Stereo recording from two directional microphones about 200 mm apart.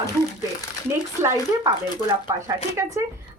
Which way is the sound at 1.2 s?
15° right (ahead or behind).